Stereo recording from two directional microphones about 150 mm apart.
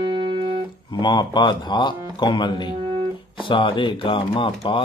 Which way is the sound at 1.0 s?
30° left (ahead or behind).